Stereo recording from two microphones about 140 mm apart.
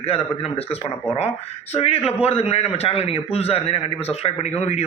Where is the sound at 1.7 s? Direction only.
45° left (ahead or behind).